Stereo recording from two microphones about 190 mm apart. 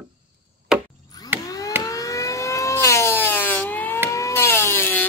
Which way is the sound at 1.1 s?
20° left (ahead or behind).